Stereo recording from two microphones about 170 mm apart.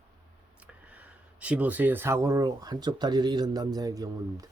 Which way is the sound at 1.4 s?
10° right (ahead or behind).